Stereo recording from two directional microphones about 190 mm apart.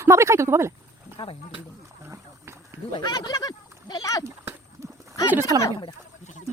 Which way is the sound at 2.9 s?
20° left (ahead or behind).